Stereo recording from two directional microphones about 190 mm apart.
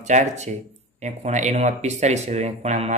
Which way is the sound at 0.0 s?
40° right (ahead or behind).